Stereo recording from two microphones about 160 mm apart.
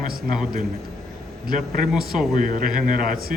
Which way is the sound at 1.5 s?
55° right (ahead or behind).